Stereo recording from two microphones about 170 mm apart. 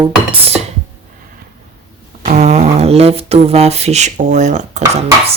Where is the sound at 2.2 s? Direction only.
45° right (ahead or behind).